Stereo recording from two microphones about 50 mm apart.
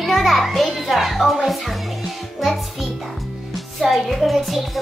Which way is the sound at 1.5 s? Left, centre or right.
Centre.